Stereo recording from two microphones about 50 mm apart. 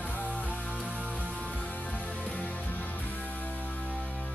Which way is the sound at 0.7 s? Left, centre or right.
Right.